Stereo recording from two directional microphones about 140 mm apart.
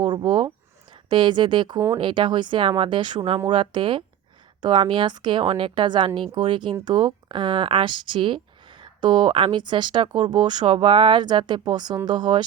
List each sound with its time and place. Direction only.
0.0 s speech: 30° right (ahead or behind)